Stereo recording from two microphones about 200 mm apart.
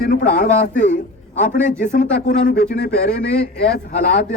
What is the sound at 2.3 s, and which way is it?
Speech, 50° left (ahead or behind).